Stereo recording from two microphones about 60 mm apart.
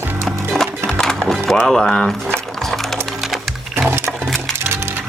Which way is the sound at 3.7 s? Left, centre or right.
Right.